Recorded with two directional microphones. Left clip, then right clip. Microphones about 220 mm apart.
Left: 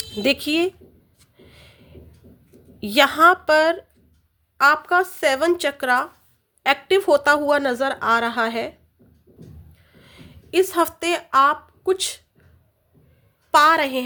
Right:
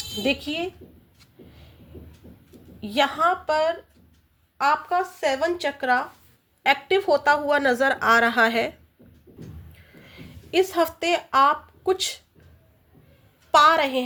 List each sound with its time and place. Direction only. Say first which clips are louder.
0.2 s a woman's voice: left 6 dB; 45° left (ahead or behind)
2.8 s a woman's voice: left 7 dB; 50° left (ahead or behind); by 7.6 s 25° left (ahead or behind)
7.6 s a woman's voice: right 1 dB; 15° left (ahead or behind)
9.7 s a sound: right 1 dB; 10° left (ahead or behind)
13.5 s a woman's voice: left 1 dB; 20° left (ahead or behind)